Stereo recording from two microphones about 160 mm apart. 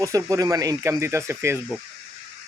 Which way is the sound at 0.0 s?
20° right (ahead or behind).